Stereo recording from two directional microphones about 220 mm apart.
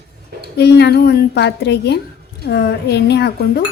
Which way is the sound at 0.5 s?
50° left (ahead or behind).